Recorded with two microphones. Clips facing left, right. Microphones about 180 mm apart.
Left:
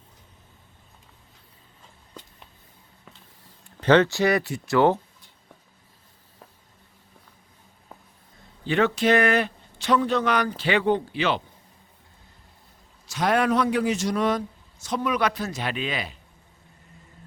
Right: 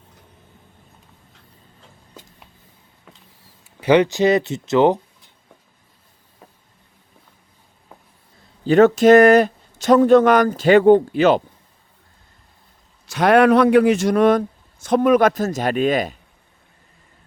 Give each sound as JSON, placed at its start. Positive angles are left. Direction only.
{"t": 3.8, "sound": "speech", "side_deg": -10}
{"t": 8.6, "sound": "a man's voice", "side_deg": -45}
{"t": 13.1, "sound": "a man's voice", "side_deg": -65}